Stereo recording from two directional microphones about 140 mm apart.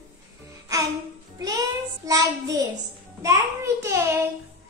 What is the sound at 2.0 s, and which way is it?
A child's voice, 25° right (ahead or behind).